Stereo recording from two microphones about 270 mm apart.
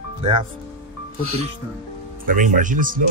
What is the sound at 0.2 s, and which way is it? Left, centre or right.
Speech, centre.